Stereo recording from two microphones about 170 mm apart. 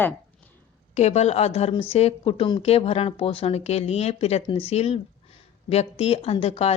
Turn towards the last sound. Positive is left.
turn(degrees=35)  # may be behind; listen again after turning